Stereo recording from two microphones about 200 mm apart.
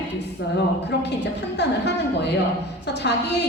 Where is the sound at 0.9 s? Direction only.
60° left (ahead or behind).